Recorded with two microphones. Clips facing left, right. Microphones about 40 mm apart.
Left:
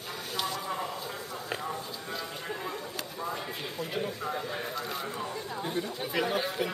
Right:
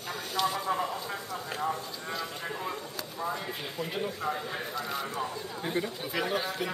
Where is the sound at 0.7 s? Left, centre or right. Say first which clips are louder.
Right 4 dB; centre.